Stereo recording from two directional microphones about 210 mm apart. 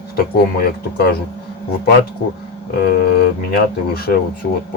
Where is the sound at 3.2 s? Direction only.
45° left (ahead or behind).